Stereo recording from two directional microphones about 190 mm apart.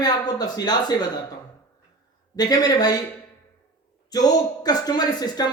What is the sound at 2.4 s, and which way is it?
Speech, 20° left (ahead or behind).